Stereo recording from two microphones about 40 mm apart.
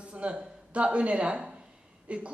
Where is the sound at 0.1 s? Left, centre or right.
Right.